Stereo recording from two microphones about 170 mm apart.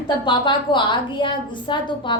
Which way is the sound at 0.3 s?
30° left (ahead or behind).